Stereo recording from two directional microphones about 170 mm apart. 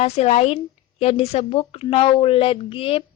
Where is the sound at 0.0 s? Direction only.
40° left (ahead or behind).